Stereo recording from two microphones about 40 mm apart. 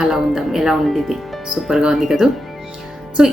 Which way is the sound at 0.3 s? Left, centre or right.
Centre.